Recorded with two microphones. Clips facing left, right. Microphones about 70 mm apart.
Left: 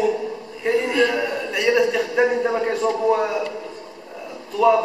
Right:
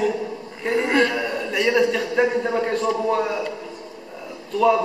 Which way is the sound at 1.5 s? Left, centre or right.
Centre.